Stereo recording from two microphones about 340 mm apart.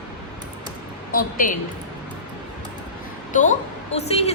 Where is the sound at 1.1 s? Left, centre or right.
Left.